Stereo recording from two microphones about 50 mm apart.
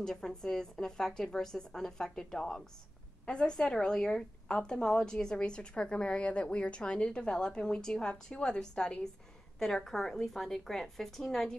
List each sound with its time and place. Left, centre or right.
0.0 s a woman's voice: centre